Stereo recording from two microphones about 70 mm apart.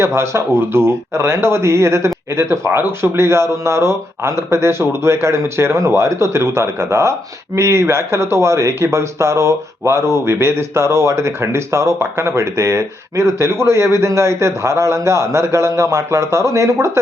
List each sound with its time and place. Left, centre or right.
0.0 s speech: right